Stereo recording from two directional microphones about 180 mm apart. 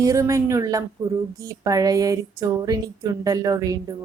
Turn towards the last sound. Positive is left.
turn(degrees=-20)  # may be behind; listen again after turning